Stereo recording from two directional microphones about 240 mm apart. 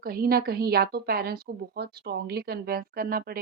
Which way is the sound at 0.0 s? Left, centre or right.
Right.